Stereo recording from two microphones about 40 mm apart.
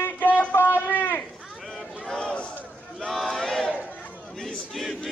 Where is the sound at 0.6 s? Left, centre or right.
Left.